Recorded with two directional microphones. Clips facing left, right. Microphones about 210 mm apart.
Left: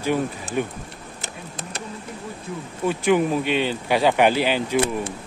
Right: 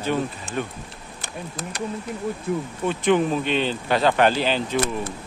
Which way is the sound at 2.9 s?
10° left (ahead or behind).